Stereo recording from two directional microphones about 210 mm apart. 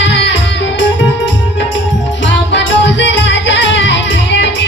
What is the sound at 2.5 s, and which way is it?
Music, 60° left (ahead or behind).